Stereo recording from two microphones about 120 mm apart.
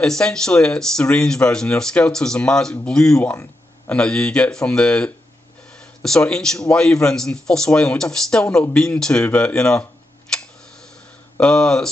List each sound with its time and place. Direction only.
0.0 s speech: 5° left (ahead or behind)
10.3 s tick: 5° left (ahead or behind)
11.3 s speech: 5° left (ahead or behind)